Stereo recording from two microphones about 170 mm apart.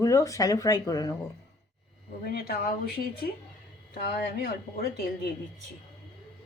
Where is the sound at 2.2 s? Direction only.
65° left (ahead or behind).